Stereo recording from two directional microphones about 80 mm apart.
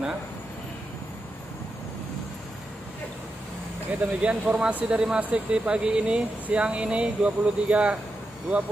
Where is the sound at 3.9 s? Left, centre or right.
Centre.